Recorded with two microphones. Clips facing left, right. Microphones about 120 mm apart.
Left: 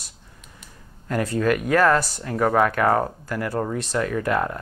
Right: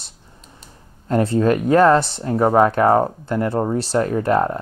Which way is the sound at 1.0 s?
30° right (ahead or behind).